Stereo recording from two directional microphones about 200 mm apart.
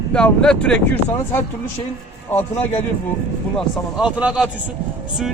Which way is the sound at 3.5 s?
5° right (ahead or behind).